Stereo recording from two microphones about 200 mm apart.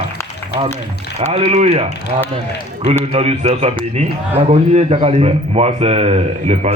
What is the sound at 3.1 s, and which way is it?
A man's voice, 30° right (ahead or behind).